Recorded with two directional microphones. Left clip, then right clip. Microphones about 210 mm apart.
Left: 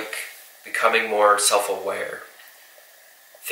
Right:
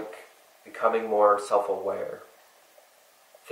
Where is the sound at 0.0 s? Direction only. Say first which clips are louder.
Left 8 dB; 10° right (ahead or behind).